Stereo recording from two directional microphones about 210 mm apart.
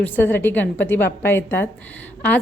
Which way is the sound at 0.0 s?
10° left (ahead or behind).